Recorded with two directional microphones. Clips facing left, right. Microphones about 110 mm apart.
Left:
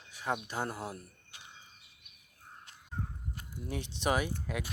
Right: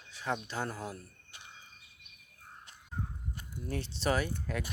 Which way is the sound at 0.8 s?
15° left (ahead or behind).